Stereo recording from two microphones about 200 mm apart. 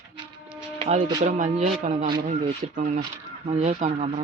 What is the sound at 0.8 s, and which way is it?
Speech, 30° right (ahead or behind).